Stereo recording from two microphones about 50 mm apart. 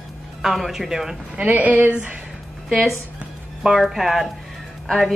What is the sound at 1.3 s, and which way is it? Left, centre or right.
Speech, right.